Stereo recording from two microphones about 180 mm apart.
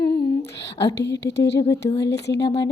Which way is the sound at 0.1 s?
65° left (ahead or behind).